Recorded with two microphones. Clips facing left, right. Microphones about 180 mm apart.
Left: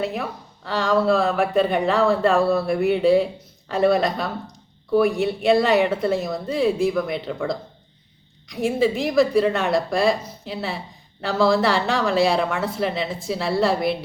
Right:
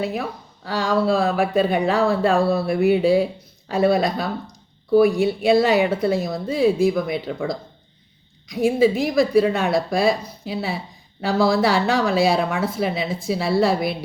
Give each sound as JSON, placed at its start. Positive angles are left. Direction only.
{"t": 0.0, "sound": "speech", "side_deg": 0}
{"t": 8.4, "sound": "speech", "side_deg": 0}